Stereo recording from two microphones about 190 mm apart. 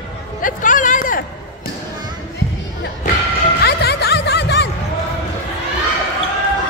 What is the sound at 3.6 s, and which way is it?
Music, 60° left (ahead or behind).